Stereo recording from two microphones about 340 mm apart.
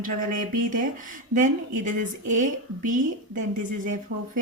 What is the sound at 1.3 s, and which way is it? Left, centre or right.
A woman's voice, right.